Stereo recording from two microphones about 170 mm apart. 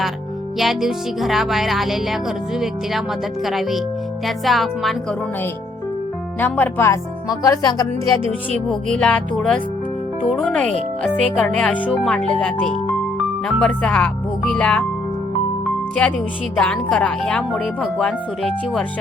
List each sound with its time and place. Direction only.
0.6 s speech: centre (ahead or behind)
6.4 s speech: 10° left (ahead or behind)
8.5 s speech: 5° left (ahead or behind)